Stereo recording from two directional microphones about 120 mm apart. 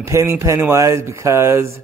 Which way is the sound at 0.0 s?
25° right (ahead or behind).